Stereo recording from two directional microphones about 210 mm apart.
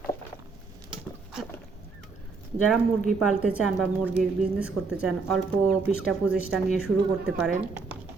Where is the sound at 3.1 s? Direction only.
Centre (ahead or behind).